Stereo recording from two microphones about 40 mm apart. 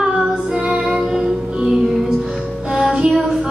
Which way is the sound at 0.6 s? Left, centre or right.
Right.